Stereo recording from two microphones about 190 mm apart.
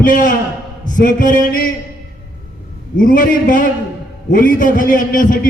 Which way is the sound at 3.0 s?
45° left (ahead or behind).